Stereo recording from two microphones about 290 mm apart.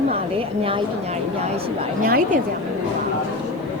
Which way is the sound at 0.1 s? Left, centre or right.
Centre.